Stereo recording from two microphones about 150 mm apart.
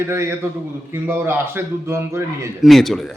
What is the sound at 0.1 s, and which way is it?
A man's voice, 20° right (ahead or behind).